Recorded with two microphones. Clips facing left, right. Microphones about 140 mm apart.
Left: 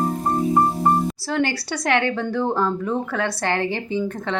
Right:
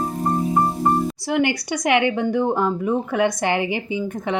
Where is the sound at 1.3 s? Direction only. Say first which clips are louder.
Right 4 dB; 15° right (ahead or behind).